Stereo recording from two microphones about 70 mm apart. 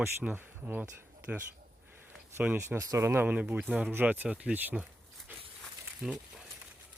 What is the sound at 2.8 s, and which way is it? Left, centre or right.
Speech, right.